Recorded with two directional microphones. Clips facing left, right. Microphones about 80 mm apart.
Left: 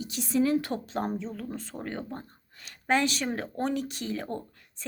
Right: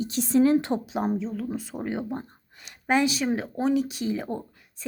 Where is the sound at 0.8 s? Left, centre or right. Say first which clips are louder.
Right 4 dB; centre.